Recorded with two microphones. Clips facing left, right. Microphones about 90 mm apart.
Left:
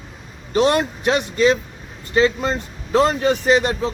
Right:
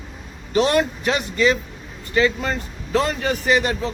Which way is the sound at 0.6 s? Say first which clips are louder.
Left 3 dB; 35° left (ahead or behind).